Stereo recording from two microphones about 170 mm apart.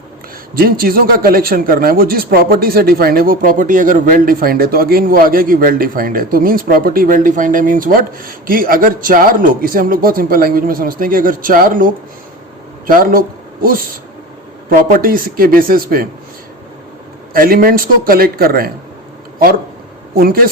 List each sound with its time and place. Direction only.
0.5 s speech: 60° right (ahead or behind)
12.9 s speech: 55° right (ahead or behind)
17.3 s speech: 55° right (ahead or behind)
20.1 s speech: 60° right (ahead or behind)